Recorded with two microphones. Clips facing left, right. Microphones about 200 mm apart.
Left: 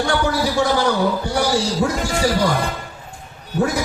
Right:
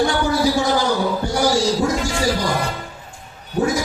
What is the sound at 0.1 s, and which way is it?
Speech, 60° left (ahead or behind).